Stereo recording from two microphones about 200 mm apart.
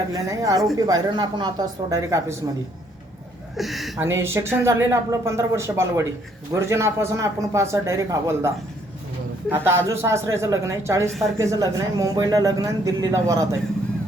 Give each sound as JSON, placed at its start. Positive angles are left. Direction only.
{"t": 0.1, "sound": "speech", "side_deg": -15}
{"t": 3.6, "sound": "speech", "side_deg": 0}
{"t": 3.9, "sound": "speech", "side_deg": -15}